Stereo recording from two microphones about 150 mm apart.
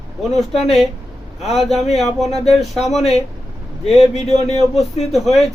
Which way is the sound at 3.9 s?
45° left (ahead or behind).